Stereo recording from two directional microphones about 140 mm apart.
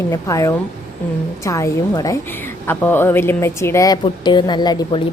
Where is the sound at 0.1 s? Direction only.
25° left (ahead or behind).